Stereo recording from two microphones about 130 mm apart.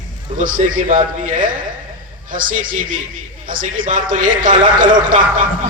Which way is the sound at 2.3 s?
90° right.